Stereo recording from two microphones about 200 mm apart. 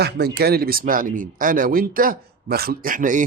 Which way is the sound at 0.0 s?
55° right (ahead or behind).